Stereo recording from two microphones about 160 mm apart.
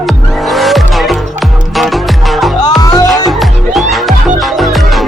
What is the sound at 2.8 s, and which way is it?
Music, 20° left (ahead or behind).